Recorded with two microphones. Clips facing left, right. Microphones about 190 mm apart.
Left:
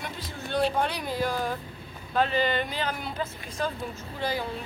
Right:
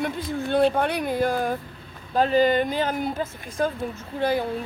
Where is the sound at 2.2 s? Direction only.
40° right (ahead or behind).